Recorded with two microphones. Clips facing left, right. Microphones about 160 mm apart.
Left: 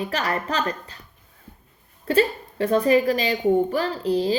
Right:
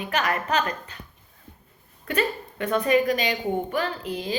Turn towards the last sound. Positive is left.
turn(degrees=35)  # may be behind; listen again after turning